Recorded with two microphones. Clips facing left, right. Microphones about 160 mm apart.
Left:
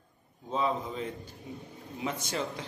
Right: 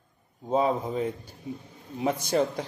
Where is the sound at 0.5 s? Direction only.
45° right (ahead or behind).